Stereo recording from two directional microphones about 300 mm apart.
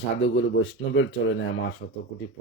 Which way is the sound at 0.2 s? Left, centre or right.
Left.